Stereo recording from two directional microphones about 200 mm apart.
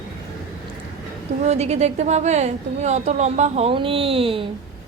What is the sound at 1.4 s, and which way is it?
A woman's voice, 35° right (ahead or behind).